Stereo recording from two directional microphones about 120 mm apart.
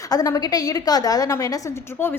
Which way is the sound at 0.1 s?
30° left (ahead or behind).